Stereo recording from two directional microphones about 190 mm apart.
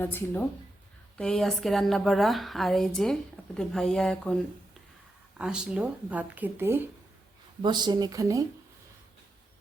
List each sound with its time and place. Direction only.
0.0 s a woman's voice: 10° left (ahead or behind)
5.4 s speech: 5° right (ahead or behind)
7.6 s speech: 25° right (ahead or behind)